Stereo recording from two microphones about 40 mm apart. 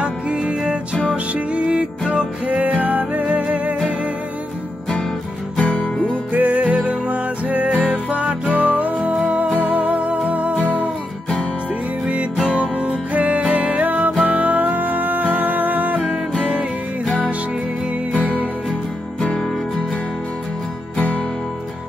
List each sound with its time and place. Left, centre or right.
0.0 s music: right
2.4 s music: right
3.3 s music: right
5.6 s music: left
6.3 s music: right
12.4 s music: right
18.1 s music: left